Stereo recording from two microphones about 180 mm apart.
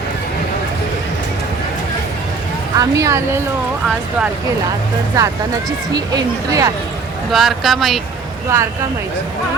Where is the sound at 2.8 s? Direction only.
15° right (ahead or behind).